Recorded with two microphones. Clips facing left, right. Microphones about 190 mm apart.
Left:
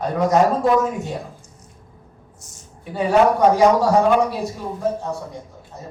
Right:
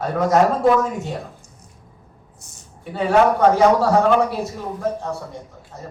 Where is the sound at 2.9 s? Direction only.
15° left (ahead or behind).